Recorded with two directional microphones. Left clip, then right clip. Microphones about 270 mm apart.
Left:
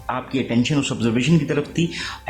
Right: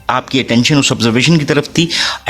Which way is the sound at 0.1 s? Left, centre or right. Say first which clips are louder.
Right 10 dB; right.